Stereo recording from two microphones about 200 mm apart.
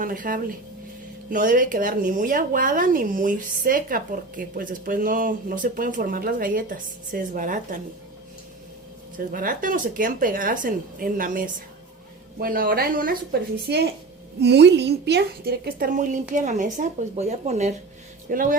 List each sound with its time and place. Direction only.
0.0 s a woman's voice: 45° right (ahead or behind)
9.1 s a woman's voice: 45° right (ahead or behind)
13.7 s a woman's voice: 55° right (ahead or behind)